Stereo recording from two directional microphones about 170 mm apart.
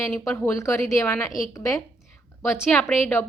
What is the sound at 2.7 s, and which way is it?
Speech, 5° left (ahead or behind).